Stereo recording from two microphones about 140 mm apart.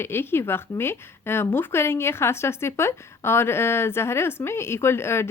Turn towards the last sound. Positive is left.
turn(degrees=20)  # may be behind; listen again after turning